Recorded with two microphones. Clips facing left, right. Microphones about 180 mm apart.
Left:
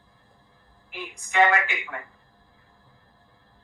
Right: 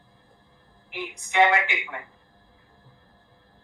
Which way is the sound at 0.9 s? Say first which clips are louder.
Right 1 dB; 20° right (ahead or behind).